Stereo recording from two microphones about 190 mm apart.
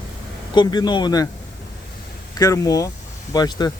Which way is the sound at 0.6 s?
20° left (ahead or behind).